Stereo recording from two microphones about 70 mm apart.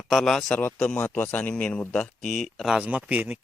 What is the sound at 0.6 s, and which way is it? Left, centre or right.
A man's voice, left.